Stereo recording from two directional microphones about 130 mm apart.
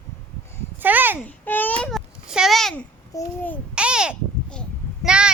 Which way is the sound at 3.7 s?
5° right (ahead or behind).